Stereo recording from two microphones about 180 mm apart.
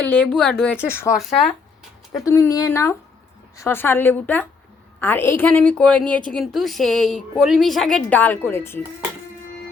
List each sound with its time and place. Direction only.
0.0 s a woman's voice: 5° left (ahead or behind)
1.1 s a woman's voice: centre (ahead or behind)
2.2 s a woman's voice: 15° left (ahead or behind)